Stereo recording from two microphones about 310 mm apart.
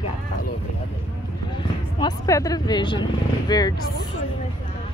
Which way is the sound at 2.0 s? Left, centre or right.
Centre.